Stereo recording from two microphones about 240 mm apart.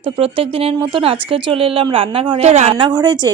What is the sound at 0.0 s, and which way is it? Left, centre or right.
Speech, right.